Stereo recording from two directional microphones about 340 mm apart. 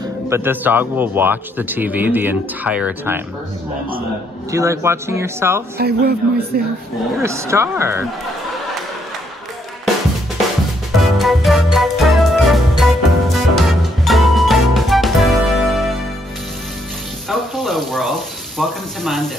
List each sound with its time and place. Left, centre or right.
0.3 s speech: centre
4.5 s speech: centre
5.8 s a man's voice: right
7.2 s speech: centre
11.1 s music: centre
17.3 s water: centre
18.6 s speech: centre